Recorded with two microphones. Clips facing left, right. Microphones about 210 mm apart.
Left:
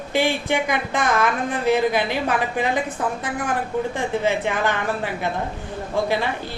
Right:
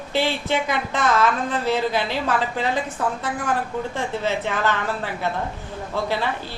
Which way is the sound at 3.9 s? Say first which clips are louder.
Left 1 dB; 15° left (ahead or behind).